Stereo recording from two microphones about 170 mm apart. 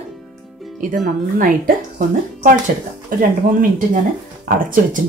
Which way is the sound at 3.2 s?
55° right (ahead or behind).